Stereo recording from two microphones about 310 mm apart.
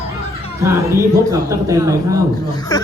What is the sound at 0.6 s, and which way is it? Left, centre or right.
Speech, centre.